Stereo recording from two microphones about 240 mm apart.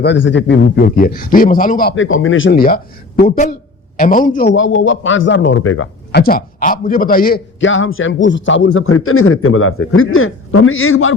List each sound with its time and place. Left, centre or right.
0.0 s speech: left
2.0 s a man's voice: left
2.6 s speech: left
4.5 s speech: left
6.1 s a man's voice: left